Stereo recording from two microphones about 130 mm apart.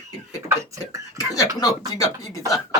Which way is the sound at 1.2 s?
25° left (ahead or behind).